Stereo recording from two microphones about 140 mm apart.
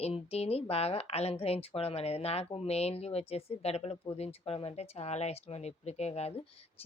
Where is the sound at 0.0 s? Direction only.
45° left (ahead or behind).